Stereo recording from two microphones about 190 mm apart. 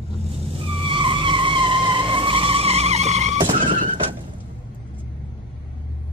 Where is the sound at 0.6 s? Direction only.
25° right (ahead or behind).